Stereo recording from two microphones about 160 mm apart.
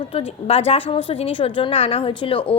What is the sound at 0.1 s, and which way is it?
Speech, 40° left (ahead or behind).